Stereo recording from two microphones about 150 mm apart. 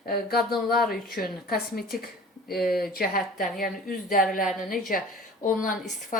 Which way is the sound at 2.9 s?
80° left.